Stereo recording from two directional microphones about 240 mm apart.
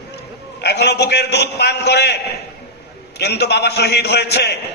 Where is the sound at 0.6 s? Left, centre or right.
Left.